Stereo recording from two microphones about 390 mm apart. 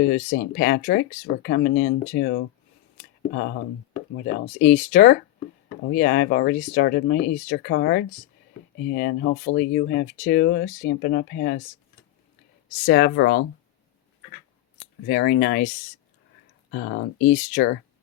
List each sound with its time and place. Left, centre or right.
0.0 s speech: centre
12.8 s speech: left
15.0 s speech: left
16.7 s speech: left